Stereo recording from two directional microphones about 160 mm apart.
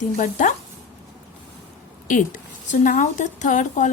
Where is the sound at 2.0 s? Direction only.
50° left (ahead or behind).